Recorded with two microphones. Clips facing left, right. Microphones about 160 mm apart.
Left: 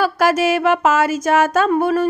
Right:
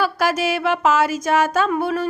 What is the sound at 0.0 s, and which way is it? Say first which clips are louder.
Speech: left 4 dB; 45° left (ahead or behind).